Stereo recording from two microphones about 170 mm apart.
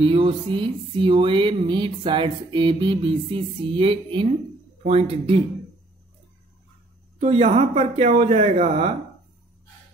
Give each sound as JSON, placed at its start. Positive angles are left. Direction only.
{"t": 0.0, "sound": "music", "side_deg": -30}
{"t": 4.8, "sound": "speech", "side_deg": -35}
{"t": 7.2, "sound": "speech", "side_deg": -35}